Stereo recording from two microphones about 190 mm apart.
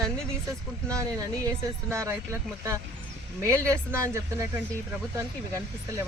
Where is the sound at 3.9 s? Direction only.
15° right (ahead or behind).